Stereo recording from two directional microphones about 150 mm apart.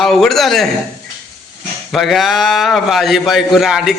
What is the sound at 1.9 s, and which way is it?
A man's voice, centre (ahead or behind).